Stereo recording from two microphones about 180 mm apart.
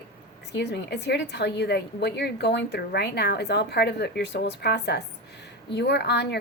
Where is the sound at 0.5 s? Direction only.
70° left (ahead or behind).